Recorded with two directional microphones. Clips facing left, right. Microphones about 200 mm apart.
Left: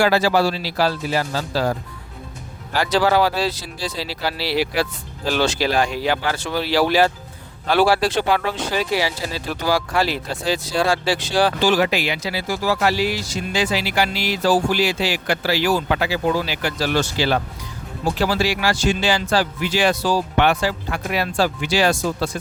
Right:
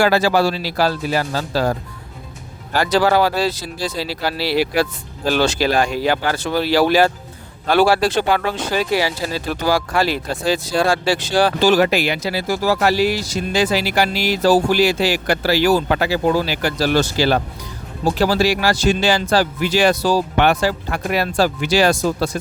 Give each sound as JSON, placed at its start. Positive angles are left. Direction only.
{"t": 0.0, "sound": "speech", "side_deg": -50}
{"t": 2.7, "sound": "speech", "side_deg": -45}